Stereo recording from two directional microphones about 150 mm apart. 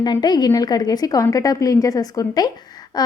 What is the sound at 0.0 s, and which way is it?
A woman's voice, 25° left (ahead or behind).